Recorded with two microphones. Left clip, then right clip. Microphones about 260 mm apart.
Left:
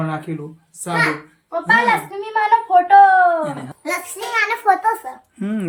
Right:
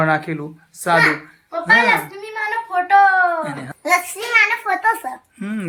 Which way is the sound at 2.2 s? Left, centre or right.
Left.